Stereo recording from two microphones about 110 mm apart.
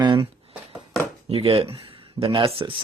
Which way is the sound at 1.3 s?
60° right (ahead or behind).